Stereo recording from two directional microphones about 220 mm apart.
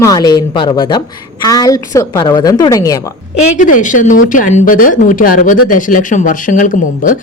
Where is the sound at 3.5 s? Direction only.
35° left (ahead or behind).